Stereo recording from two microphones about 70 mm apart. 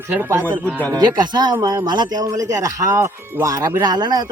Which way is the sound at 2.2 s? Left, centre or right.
Right.